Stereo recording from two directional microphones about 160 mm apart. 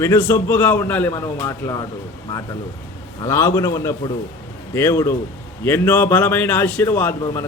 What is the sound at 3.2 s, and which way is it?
A man's voice, 15° left (ahead or behind).